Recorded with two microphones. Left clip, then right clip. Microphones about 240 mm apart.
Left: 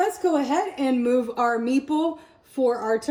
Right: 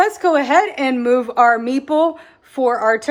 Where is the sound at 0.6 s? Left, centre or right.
Centre.